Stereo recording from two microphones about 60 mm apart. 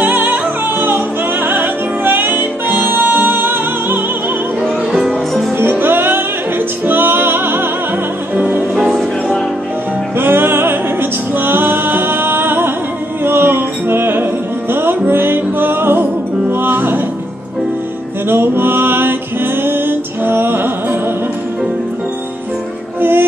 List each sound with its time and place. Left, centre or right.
0.0 s music: right
5.6 s music: right
8.7 s music: centre
10.1 s music: right
18.3 s music: right
22.9 s music: right